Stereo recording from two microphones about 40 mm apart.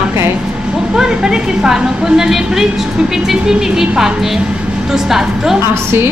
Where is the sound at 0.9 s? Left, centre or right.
Centre.